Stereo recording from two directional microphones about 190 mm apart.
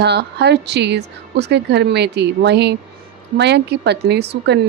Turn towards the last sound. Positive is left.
turn(degrees=-60)  # may be behind; listen again after turning